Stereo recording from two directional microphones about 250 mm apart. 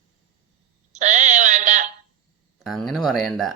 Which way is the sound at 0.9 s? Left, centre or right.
Right.